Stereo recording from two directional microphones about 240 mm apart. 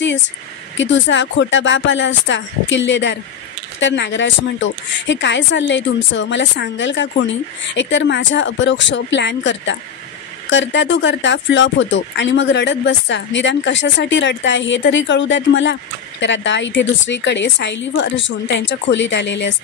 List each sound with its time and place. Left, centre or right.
0.7 s speech: left